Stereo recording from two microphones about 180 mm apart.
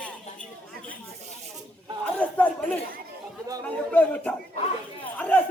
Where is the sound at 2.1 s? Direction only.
10° left (ahead or behind).